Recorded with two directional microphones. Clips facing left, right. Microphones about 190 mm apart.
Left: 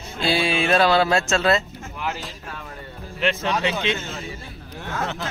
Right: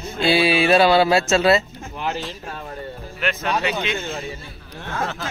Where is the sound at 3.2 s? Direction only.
30° left (ahead or behind).